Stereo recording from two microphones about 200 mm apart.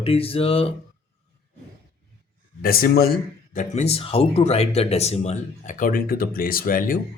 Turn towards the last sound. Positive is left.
turn(degrees=45)  # may be behind; listen again after turning